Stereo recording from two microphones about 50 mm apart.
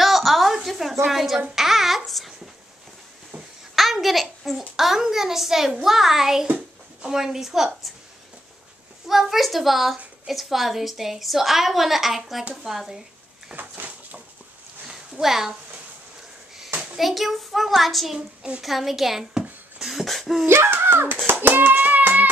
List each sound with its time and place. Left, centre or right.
0.0 s a sound: centre
1.0 s a woman's voice: centre
1.5 s babbling: centre
3.7 s a child's voice: centre
6.5 s hands: centre
7.2 s a woman's voice: centre
9.0 s a woman's voice: centre
13.6 s a sound: right
14.9 s a sound: centre
16.9 s a woman's voice: centre
20.4 s a sound: right
21.3 s a child's voice: right
21.7 s music: right